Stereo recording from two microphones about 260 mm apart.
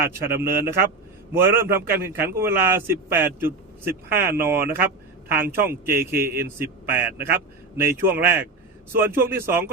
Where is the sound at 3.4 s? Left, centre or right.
Right.